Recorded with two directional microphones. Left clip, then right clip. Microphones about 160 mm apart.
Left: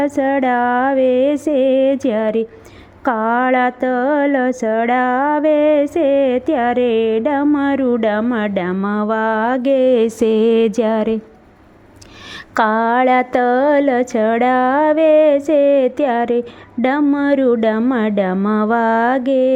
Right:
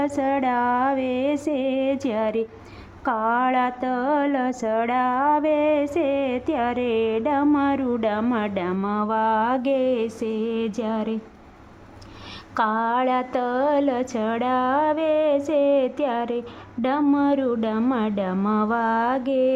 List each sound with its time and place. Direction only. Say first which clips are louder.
0.0 s a sound: left 7 dB; 30° left (ahead or behind)
8.2 s speech: left 6 dB; 25° left (ahead or behind)
12.5 s speech: left 7 dB; 35° left (ahead or behind)